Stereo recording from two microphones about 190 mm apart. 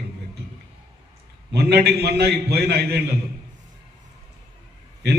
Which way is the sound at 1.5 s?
60° right (ahead or behind).